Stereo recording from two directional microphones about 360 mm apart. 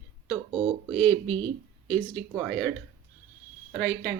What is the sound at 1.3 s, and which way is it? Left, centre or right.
Speech, centre.